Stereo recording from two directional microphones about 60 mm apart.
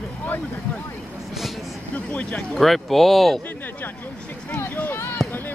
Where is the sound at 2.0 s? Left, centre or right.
Left.